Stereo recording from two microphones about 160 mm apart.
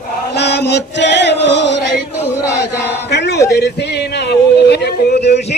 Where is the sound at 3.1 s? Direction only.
90° left.